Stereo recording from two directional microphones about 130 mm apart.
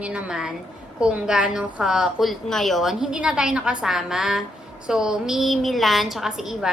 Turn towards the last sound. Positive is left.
turn(degrees=-5)  # may be behind; listen again after turning